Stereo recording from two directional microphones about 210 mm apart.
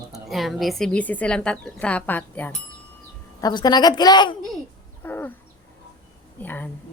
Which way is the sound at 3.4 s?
20° left (ahead or behind).